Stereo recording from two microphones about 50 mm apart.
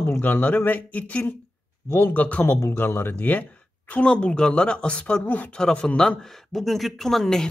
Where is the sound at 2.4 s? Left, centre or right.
Left.